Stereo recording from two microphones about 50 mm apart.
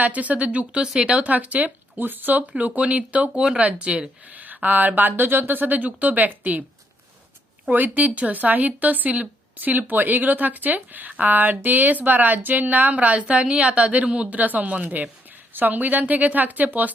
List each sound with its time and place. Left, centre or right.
0.0 s speech: right
2.5 s speech: right
7.7 s speech: right